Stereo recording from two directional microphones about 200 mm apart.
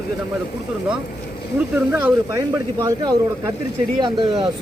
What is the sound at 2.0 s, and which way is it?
Speech, 15° right (ahead or behind).